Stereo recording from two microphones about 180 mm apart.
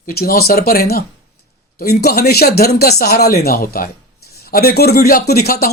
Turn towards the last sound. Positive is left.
turn(degrees=60)  # may be behind; listen again after turning